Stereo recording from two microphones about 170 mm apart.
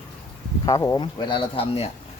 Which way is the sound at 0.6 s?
20° left (ahead or behind).